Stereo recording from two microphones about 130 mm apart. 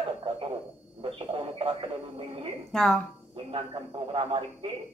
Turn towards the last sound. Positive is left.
turn(degrees=-40)  # may be behind; listen again after turning